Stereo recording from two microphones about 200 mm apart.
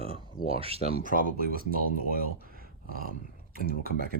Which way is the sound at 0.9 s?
45° left (ahead or behind).